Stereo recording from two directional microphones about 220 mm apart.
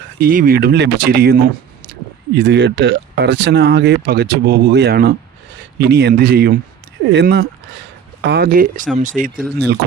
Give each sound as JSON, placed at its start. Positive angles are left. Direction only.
{"t": 0.2, "sound": "speech", "side_deg": -40}